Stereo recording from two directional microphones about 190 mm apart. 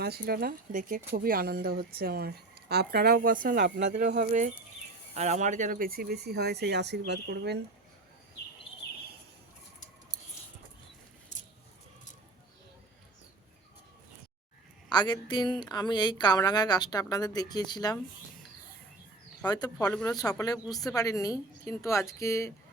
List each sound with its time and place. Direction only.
0.0 s speech: 55° right (ahead or behind)
14.8 s a woman's voice: 25° left (ahead or behind)
19.5 s a woman's voice: 20° left (ahead or behind)
20.7 s speech: centre (ahead or behind)
20.9 s speech: 20° left (ahead or behind)